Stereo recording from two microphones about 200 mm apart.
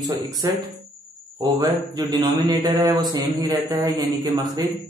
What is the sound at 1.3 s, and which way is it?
A man's voice, 20° right (ahead or behind).